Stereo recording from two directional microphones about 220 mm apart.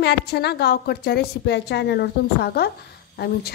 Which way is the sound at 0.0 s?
50° left (ahead or behind).